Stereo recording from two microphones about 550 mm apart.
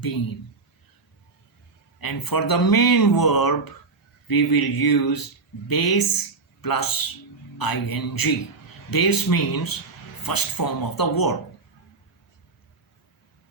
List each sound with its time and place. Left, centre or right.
0.0 s speech: left
2.0 s a man's voice: left